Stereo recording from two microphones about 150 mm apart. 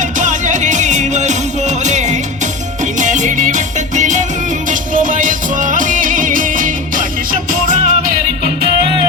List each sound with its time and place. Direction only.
0.2 s music: 55° right (ahead or behind)